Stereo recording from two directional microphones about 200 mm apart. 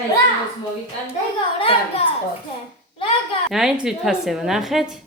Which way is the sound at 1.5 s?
30° left (ahead or behind).